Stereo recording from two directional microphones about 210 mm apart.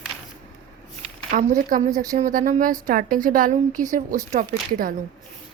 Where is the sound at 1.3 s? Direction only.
40° right (ahead or behind).